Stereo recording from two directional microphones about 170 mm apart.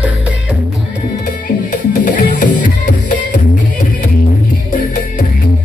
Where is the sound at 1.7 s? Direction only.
50° left (ahead or behind).